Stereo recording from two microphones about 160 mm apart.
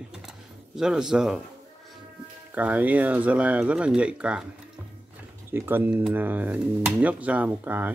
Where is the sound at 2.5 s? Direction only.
10° right (ahead or behind).